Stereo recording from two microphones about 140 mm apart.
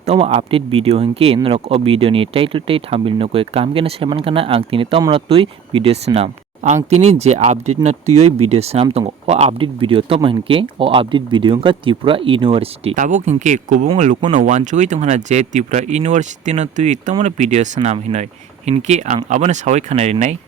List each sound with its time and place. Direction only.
0.0 s speech: 45° right (ahead or behind)
13.0 s speech: 65° right (ahead or behind)